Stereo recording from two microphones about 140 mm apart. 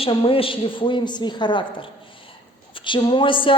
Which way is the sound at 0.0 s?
40° left (ahead or behind).